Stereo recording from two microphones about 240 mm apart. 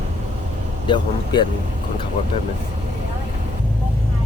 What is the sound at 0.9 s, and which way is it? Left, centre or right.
Speech, centre.